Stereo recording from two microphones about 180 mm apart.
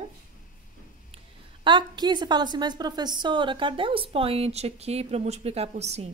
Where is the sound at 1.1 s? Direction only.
25° right (ahead or behind).